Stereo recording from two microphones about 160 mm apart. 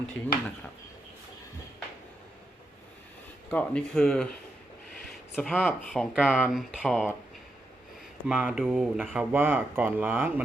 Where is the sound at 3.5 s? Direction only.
5° left (ahead or behind).